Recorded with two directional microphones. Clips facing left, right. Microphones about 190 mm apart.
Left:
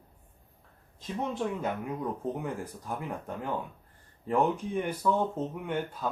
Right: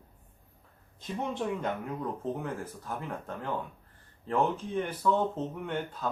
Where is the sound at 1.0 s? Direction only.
Centre (ahead or behind).